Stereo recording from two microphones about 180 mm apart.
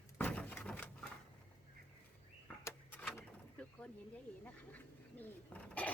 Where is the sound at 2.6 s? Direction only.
10° left (ahead or behind).